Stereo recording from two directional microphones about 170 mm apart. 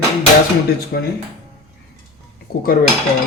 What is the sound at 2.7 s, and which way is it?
Speech, 60° left (ahead or behind).